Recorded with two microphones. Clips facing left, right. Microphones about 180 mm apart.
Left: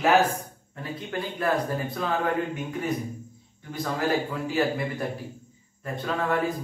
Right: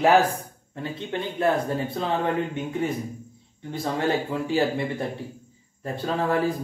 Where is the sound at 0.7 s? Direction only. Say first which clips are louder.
Right 2 dB; 25° right (ahead or behind).